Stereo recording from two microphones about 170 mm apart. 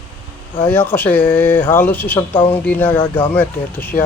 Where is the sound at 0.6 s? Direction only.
15° left (ahead or behind).